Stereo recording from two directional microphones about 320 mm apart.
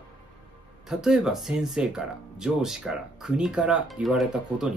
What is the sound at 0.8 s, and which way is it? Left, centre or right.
Speech, centre.